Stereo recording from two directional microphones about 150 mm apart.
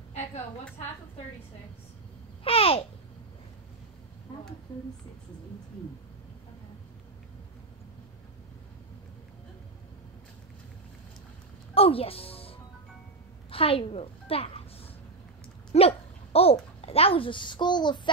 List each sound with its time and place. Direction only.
2.4 s a child's voice: 40° left (ahead or behind)
11.7 s music: 40° left (ahead or behind)
13.5 s a woman's voice: 40° left (ahead or behind)
15.7 s a child's voice: 40° left (ahead or behind)